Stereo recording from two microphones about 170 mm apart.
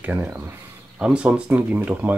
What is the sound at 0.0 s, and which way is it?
Speech, 10° right (ahead or behind).